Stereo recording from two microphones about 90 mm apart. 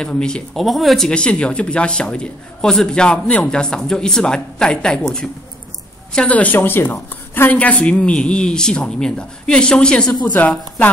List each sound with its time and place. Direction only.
0.0 s speech: 10° left (ahead or behind)